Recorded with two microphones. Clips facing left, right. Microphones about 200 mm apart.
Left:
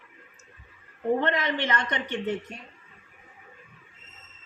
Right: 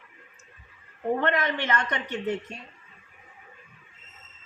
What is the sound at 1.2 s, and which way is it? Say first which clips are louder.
Speech: even; 20° left (ahead or behind).